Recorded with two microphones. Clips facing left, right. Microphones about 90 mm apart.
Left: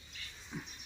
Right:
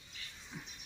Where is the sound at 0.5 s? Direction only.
35° left (ahead or behind).